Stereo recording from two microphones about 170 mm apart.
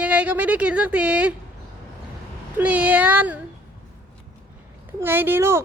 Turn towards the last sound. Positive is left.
turn(degrees=-15)  # may be behind; listen again after turning